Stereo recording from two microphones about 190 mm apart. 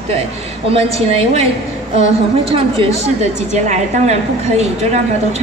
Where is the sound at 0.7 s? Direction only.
30° right (ahead or behind).